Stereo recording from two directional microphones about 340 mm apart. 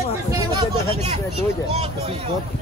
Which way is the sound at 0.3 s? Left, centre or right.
Centre.